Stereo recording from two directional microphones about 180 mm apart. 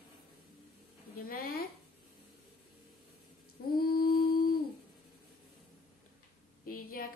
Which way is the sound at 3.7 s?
55° left (ahead or behind).